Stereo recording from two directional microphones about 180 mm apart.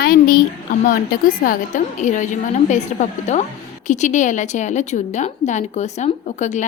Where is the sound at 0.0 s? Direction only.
55° left (ahead or behind).